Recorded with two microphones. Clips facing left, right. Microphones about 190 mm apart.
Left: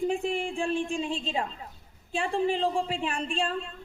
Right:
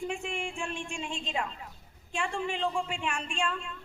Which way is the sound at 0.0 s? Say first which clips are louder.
Left 7 dB; 35° left (ahead or behind).